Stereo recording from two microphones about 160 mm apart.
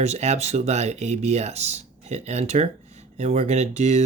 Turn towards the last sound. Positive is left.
turn(degrees=-45)  # may be behind; listen again after turning